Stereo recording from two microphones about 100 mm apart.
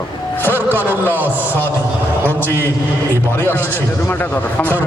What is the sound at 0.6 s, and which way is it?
Speech, 20° right (ahead or behind).